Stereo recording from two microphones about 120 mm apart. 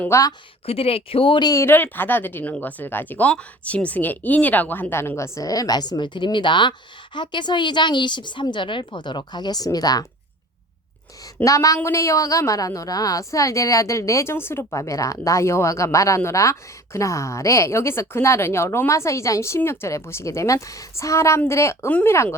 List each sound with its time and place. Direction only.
0.1 s a woman's voice: 30° left (ahead or behind)
0.6 s speech: 50° left (ahead or behind)
1.5 s a woman's voice: 25° left (ahead or behind)
11.4 s a woman's voice: 25° left (ahead or behind)